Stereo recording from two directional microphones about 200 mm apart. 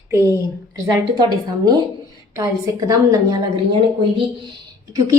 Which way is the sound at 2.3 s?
15° right (ahead or behind).